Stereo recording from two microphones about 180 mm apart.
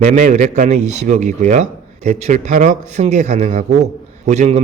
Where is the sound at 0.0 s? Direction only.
45° right (ahead or behind).